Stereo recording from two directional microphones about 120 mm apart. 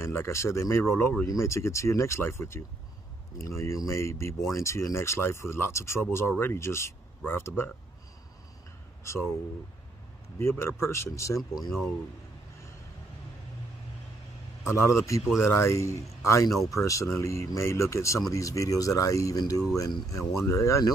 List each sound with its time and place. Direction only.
0.0 s speech: 20° left (ahead or behind)
10.4 s speech: 20° left (ahead or behind)
14.7 s speech: 25° left (ahead or behind)